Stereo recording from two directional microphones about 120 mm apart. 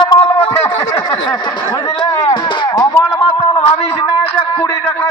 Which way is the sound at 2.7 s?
30° left (ahead or behind).